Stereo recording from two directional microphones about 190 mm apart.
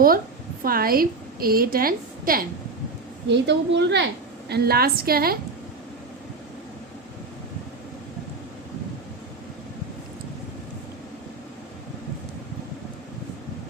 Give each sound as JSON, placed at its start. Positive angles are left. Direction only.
{"t": 0.6, "sound": "a woman's voice", "side_deg": -50}
{"t": 3.2, "sound": "a woman's voice", "side_deg": -65}
{"t": 4.4, "sound": "a woman's voice", "side_deg": -55}